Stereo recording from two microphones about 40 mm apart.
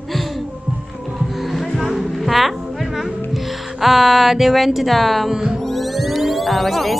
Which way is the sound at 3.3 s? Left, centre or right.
Centre.